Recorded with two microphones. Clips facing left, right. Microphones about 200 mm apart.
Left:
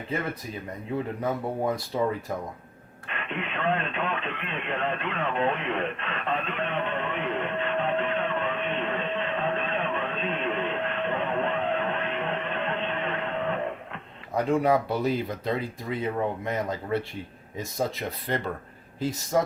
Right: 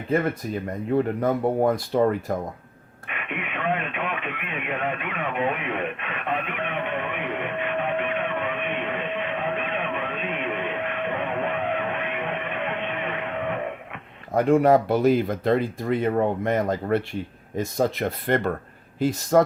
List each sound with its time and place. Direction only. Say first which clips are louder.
1.6 s speech: right 4 dB; 50° right (ahead or behind)
3.1 s radio: right 1 dB; 15° right (ahead or behind)
14.3 s speech: right 5 dB; 50° right (ahead or behind)